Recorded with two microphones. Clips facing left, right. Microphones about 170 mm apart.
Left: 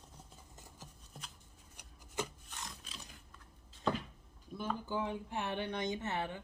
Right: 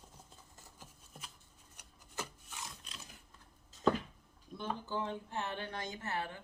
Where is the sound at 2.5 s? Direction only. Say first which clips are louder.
Even; centre (ahead or behind).